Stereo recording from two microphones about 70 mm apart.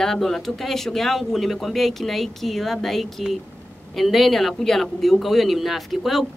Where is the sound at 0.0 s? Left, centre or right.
Centre.